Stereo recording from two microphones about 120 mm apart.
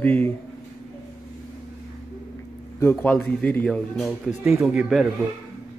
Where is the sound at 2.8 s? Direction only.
15° left (ahead or behind); by 5.1 s centre (ahead or behind).